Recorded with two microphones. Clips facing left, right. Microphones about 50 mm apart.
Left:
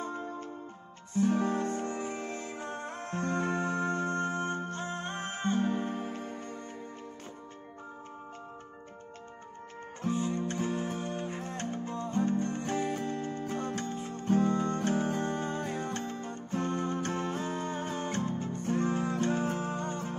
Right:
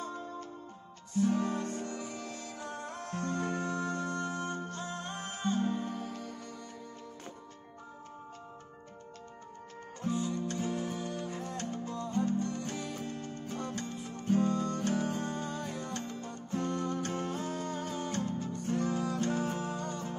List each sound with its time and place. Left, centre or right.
0.0 s music: left
10.0 s music: left